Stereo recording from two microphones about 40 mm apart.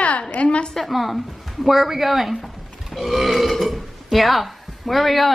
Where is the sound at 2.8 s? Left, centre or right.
Centre.